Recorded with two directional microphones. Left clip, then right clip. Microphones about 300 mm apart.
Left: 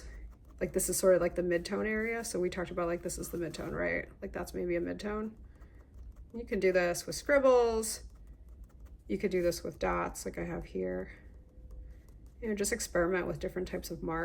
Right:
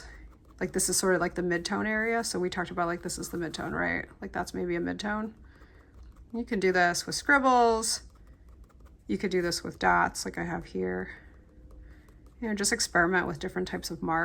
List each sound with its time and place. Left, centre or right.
0.7 s speech: centre
6.3 s speech: centre
9.1 s speech: centre
12.5 s speech: centre